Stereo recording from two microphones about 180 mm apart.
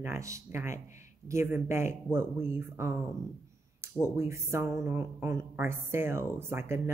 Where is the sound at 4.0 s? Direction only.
15° right (ahead or behind).